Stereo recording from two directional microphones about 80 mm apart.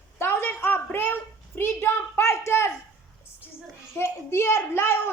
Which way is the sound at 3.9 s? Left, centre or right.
Left.